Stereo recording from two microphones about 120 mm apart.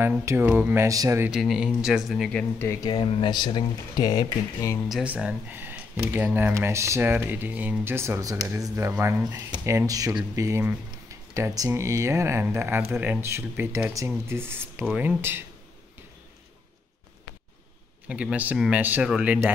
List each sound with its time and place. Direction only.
0.2 s speech: 20° right (ahead or behind)
0.8 s speech: 30° right (ahead or behind)
1.3 s speech: 5° right (ahead or behind)
2.6 s speech: 25° left (ahead or behind)
2.9 s speech: 45° left (ahead or behind); by 4.8 s 25° left (ahead or behind)
5.0 s speech: 10° right (ahead or behind)
18.0 s speech: 10° right (ahead or behind)